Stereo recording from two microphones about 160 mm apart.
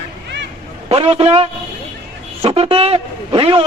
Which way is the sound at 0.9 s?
40° right (ahead or behind).